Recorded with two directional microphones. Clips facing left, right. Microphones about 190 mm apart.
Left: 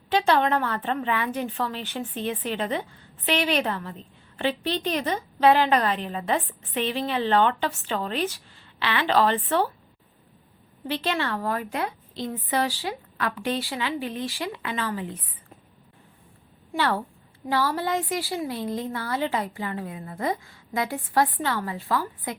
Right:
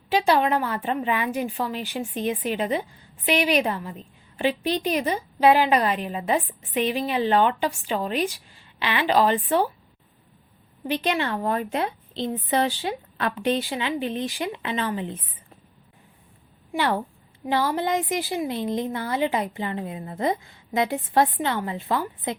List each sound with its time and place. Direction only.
0.1 s a woman's voice: 10° right (ahead or behind)
10.8 s a woman's voice: 15° right (ahead or behind)
16.7 s a woman's voice: 15° right (ahead or behind)